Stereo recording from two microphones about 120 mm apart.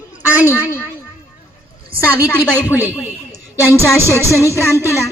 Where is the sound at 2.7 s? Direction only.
20° left (ahead or behind).